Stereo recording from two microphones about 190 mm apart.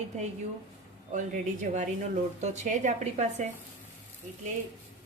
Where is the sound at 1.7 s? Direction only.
35° right (ahead or behind).